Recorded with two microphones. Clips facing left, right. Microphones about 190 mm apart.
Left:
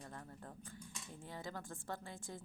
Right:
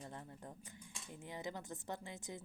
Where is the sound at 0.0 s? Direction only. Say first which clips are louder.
Right 1 dB; 20° right (ahead or behind).